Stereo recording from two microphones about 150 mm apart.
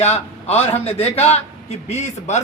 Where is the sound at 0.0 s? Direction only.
45° left (ahead or behind).